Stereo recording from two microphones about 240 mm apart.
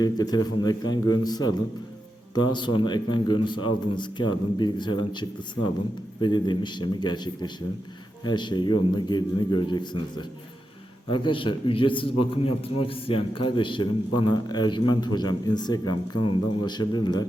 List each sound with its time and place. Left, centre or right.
0.0 s a man's voice: centre
6.2 s a man's voice: centre